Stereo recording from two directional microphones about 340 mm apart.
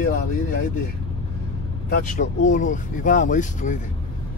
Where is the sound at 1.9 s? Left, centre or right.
Left.